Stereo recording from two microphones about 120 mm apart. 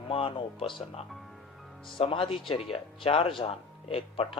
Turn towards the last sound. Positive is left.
turn(degrees=50)  # may be behind; listen again after turning